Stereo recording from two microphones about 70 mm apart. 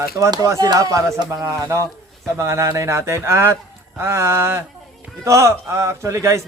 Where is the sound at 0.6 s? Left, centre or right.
Right.